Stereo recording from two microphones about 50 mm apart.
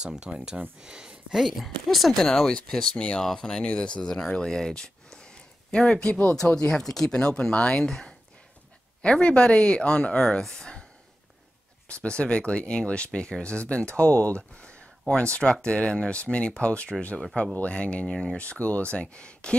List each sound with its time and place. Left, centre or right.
0.0 s speech: centre
1.4 s speech: centre
3.0 s speech: left
9.0 s speech: left
11.9 s speech: left
18.4 s speech: left